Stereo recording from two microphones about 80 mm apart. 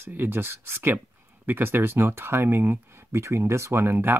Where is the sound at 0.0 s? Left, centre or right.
Right.